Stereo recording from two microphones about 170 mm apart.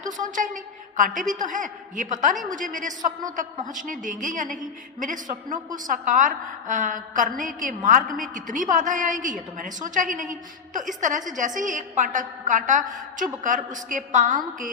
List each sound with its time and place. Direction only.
0.2 s a woman's voice: 50° right (ahead or behind)